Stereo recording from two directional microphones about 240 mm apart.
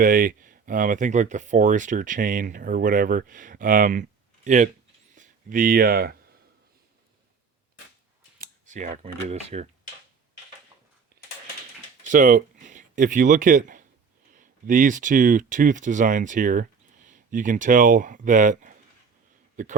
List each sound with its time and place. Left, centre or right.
0.0 s speech: right
5.1 s a sound: right
8.4 s scissors: right
9.2 s speech: right
11.2 s a sound: right
12.0 s speech: right